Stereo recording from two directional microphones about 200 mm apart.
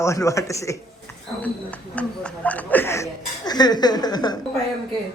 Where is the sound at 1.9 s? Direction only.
5° left (ahead or behind).